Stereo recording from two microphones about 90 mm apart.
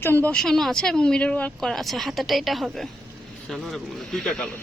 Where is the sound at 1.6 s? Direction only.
Centre (ahead or behind).